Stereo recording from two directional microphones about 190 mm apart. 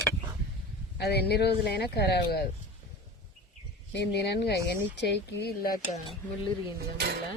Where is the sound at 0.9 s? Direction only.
60° left (ahead or behind).